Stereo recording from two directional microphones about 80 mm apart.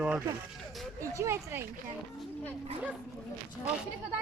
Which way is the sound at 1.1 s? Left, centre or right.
Right.